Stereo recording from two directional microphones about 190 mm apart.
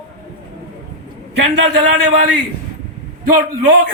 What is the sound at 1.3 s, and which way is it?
Speech, 60° right (ahead or behind).